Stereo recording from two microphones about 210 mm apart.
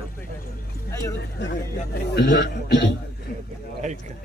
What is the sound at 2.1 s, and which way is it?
Speech, 45° left (ahead or behind).